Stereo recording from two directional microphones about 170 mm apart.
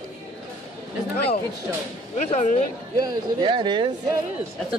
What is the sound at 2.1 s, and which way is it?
Speech, 45° left (ahead or behind).